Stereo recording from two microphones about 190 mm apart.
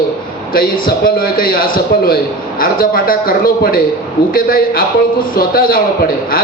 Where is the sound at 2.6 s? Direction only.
50° left (ahead or behind).